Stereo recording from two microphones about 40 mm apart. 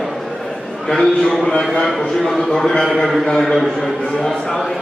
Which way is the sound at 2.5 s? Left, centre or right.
Centre.